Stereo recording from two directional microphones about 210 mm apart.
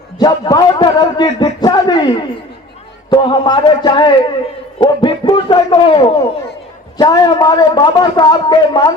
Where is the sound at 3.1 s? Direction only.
20° left (ahead or behind).